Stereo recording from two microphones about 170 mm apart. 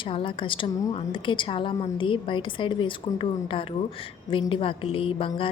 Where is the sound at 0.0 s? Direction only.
30° left (ahead or behind).